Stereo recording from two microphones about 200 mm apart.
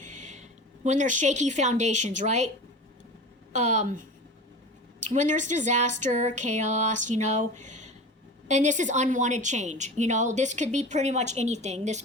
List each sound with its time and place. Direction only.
0.0 s a sound: 35° right (ahead or behind)
0.9 s a woman's voice: 40° right (ahead or behind)
3.5 s a woman's voice: 35° right (ahead or behind)